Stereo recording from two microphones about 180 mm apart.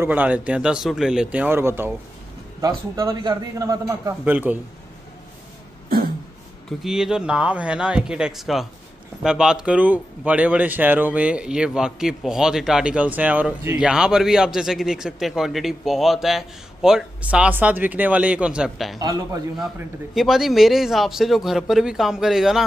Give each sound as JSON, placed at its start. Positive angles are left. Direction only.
{"t": 0.0, "sound": "a man's voice", "side_deg": -10}
{"t": 4.2, "sound": "speech", "side_deg": -10}
{"t": 6.8, "sound": "a man's voice", "side_deg": -5}
{"t": 18.9, "sound": "a man's voice", "side_deg": -20}
{"t": 20.2, "sound": "a man's voice", "side_deg": 0}